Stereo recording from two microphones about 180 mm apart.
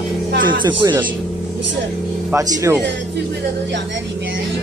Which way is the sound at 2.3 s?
20° right (ahead or behind).